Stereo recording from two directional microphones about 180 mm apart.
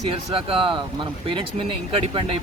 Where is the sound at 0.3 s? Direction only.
30° right (ahead or behind).